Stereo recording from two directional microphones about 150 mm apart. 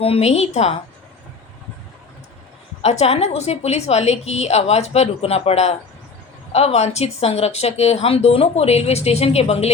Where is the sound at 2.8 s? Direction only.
45° left (ahead or behind).